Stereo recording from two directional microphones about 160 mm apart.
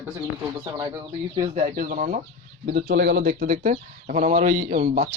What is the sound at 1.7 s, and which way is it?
Speech, 55° right (ahead or behind).